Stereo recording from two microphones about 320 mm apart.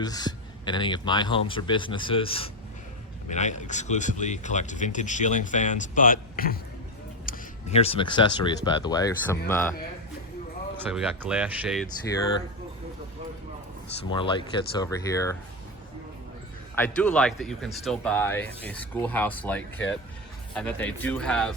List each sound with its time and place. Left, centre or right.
0.0 s speech: centre
10.8 s speech: centre
14.0 s speech: centre
16.7 s speech: centre